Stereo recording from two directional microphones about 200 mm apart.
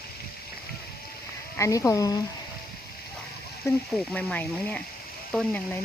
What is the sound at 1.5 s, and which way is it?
Speech, 15° left (ahead or behind).